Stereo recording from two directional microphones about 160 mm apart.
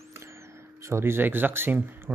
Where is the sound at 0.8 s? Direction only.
15° right (ahead or behind).